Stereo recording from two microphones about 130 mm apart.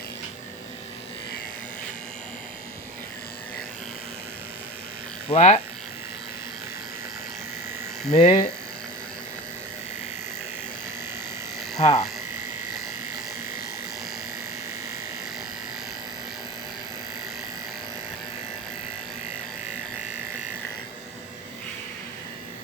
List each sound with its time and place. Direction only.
5.3 s speech: 60° left (ahead or behind)
8.1 s speech: 55° left (ahead or behind)
11.8 s speech: 50° left (ahead or behind)